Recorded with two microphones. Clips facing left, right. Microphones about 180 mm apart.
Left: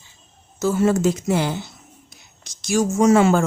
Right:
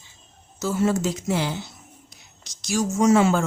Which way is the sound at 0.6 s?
55° left (ahead or behind).